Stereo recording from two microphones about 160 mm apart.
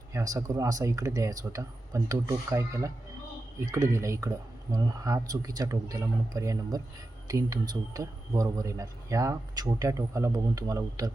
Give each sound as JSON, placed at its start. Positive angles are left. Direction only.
{"t": 0.1, "sound": "speech", "side_deg": -20}